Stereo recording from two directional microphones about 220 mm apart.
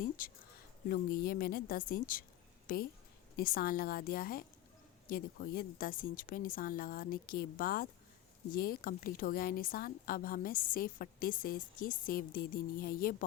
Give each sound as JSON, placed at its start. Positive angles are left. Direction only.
{"t": 0.2, "sound": "a woman's voice", "side_deg": 40}